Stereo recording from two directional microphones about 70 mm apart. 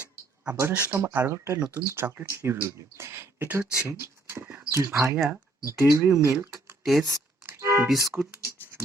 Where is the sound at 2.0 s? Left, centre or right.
Right.